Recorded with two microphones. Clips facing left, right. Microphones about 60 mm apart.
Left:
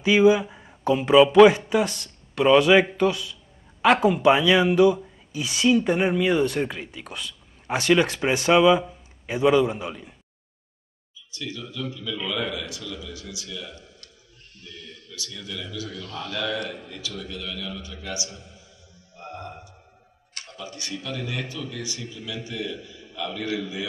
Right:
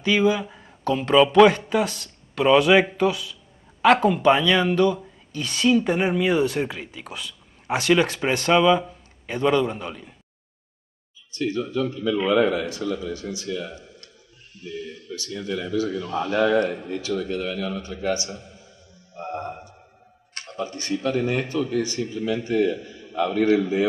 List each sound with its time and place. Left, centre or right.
0.0 s speech: centre
11.3 s a man's voice: right
14.6 s a man's voice: centre
15.0 s a man's voice: right
16.0 s a man's voice: right
16.3 s a man's voice: right
19.1 s a sound: right
20.3 s a man's voice: right